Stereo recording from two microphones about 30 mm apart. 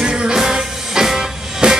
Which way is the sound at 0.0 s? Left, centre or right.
Right.